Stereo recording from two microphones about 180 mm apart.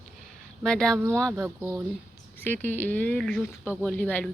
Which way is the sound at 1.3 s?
10° right (ahead or behind).